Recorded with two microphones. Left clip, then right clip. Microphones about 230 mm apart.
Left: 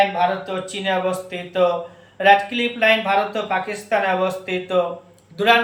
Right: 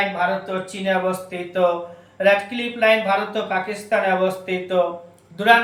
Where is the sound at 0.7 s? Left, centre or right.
Centre.